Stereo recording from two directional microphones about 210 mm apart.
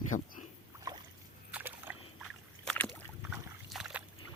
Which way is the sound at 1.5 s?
10° right (ahead or behind).